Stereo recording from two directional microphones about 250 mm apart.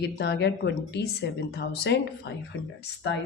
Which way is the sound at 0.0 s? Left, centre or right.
Left.